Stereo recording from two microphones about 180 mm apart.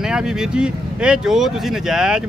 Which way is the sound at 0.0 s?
5° right (ahead or behind).